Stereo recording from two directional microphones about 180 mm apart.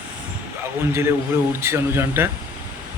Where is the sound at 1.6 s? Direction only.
15° right (ahead or behind).